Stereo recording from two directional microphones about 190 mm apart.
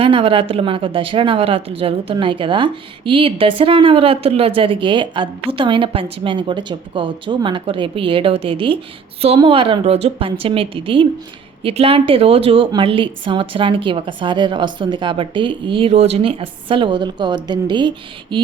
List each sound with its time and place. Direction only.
0.0 s a woman's voice: 30° right (ahead or behind)